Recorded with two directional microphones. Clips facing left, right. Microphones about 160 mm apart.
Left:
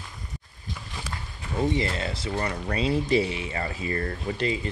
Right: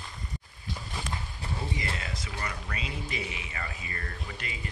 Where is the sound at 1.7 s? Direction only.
30° left (ahead or behind).